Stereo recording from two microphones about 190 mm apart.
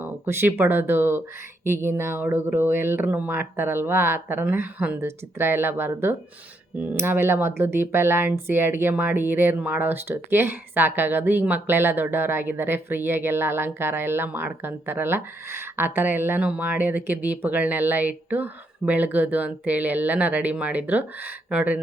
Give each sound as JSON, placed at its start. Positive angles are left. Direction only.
{"t": 0.0, "sound": "speech", "side_deg": -10}